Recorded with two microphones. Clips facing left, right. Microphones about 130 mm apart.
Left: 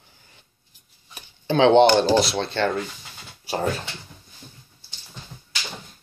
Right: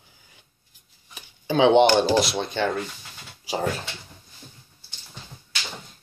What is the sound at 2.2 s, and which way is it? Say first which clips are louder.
Speech: left 2 dB; 15° right (ahead or behind).